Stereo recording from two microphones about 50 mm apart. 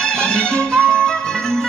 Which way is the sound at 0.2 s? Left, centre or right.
Centre.